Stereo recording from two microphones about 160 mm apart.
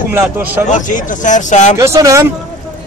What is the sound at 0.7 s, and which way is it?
Speech, 55° left (ahead or behind).